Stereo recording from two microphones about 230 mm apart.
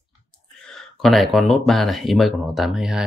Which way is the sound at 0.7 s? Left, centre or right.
Centre.